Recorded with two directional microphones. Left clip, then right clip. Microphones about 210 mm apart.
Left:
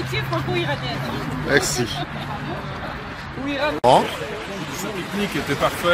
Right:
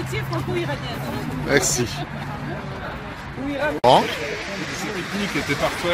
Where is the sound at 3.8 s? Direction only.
Centre (ahead or behind).